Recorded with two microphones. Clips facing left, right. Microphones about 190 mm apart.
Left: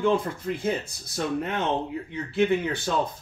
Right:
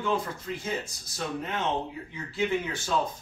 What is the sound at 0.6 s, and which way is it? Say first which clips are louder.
Speech: left 6 dB; 60° left (ahead or behind).